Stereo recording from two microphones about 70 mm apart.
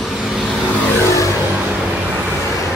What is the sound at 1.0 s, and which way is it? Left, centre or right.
Vehicle, left.